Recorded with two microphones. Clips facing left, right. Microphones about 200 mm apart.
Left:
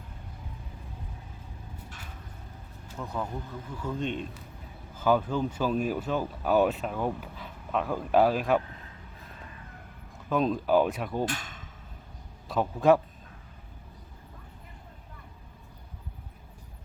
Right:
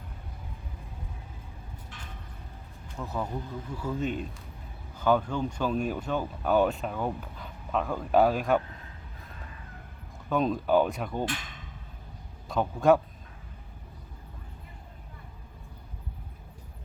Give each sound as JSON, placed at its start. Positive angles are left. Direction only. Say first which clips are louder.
{"t": 3.0, "sound": "speech", "louder": "right 1 dB", "side_deg": -5}
{"t": 10.2, "sound": "speech", "louder": "even", "side_deg": 0}
{"t": 12.5, "sound": "speech", "louder": "even", "side_deg": 0}